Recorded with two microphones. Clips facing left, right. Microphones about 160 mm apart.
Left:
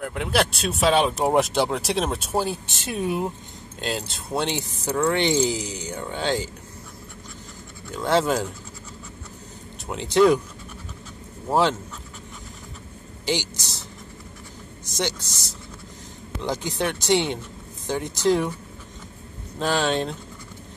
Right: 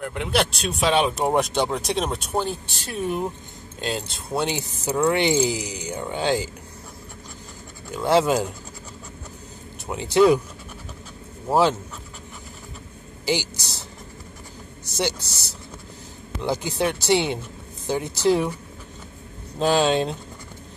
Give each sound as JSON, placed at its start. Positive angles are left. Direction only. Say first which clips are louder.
{"t": 0.0, "sound": "speech", "louder": "even", "side_deg": 0}
{"t": 2.6, "sound": "speech", "louder": "left 1 dB", "side_deg": 20}
{"t": 3.1, "sound": "speech", "louder": "even", "side_deg": 5}
{"t": 7.9, "sound": "speech", "louder": "right 2 dB", "side_deg": -10}
{"t": 9.8, "sound": "speech", "louder": "right 1 dB", "side_deg": -5}
{"t": 11.4, "sound": "speech", "louder": "right 2 dB", "side_deg": -5}
{"t": 13.2, "sound": "speech", "louder": "right 2 dB", "side_deg": -10}
{"t": 15.0, "sound": "speech", "louder": "right 2 dB", "side_deg": -10}
{"t": 16.4, "sound": "speech", "louder": "right 2 dB", "side_deg": -5}
{"t": 19.6, "sound": "speech", "louder": "right 4 dB", "side_deg": -15}